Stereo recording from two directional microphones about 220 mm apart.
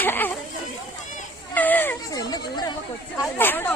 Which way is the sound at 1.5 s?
10° left (ahead or behind).